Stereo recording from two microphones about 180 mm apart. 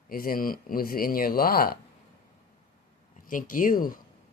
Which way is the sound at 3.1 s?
50° left (ahead or behind).